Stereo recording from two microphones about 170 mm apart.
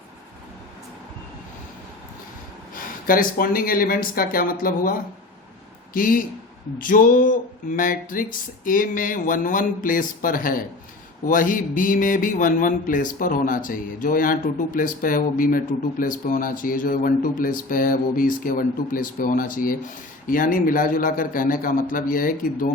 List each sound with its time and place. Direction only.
2.7 s a man's voice: 55° left (ahead or behind)